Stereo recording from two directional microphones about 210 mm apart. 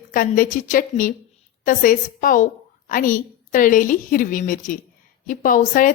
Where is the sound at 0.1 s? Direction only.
40° left (ahead or behind).